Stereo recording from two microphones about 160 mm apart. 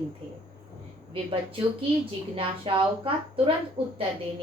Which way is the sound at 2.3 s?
35° right (ahead or behind).